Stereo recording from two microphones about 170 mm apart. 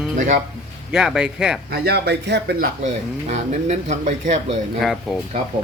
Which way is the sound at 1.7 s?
70° right (ahead or behind).